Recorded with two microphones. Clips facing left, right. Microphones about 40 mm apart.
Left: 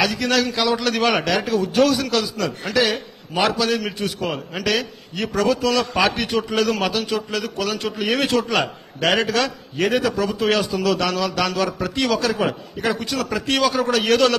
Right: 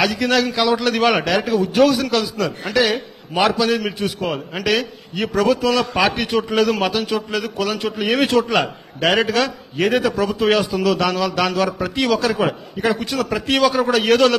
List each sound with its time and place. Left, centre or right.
0.0 s a man's voice: centre